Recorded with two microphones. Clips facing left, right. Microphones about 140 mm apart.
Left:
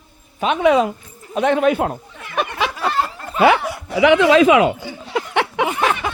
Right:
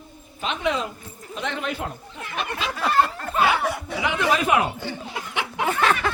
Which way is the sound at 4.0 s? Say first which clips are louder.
Left 12 dB; 90° left.